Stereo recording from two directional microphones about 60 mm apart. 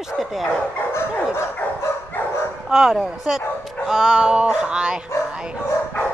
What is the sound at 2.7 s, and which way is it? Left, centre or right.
Music, centre.